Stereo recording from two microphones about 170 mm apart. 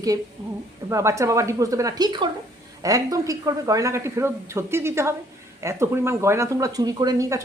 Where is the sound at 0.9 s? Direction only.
15° right (ahead or behind).